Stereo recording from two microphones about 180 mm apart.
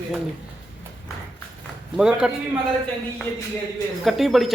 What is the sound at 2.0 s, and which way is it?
Speech, 5° right (ahead or behind).